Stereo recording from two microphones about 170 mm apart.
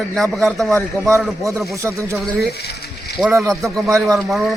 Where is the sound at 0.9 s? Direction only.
20° right (ahead or behind).